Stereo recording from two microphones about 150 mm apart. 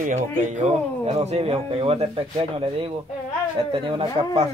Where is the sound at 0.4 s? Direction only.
50° right (ahead or behind).